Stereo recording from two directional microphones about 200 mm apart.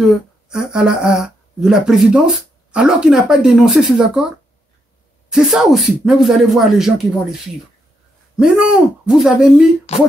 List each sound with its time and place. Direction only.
0.5 s speech: 5° right (ahead or behind)
5.3 s speech: centre (ahead or behind)
8.4 s speech: 5° right (ahead or behind)
9.9 s speech: 30° left (ahead or behind)